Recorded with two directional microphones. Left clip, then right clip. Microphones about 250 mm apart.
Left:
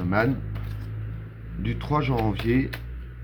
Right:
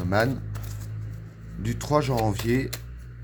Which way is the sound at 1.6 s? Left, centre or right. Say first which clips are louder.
Right 2 dB; right.